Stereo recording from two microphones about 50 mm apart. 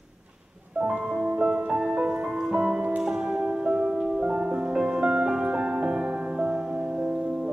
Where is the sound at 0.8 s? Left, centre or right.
Right.